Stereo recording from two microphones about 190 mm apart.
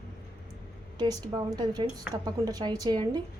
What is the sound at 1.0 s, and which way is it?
A woman's voice, 20° right (ahead or behind).